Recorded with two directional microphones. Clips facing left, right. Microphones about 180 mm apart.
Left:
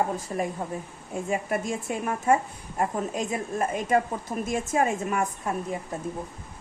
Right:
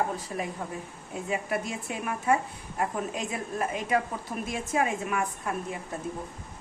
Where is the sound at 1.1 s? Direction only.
45° left (ahead or behind).